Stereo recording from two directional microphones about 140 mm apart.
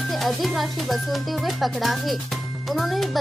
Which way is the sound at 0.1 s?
Centre (ahead or behind).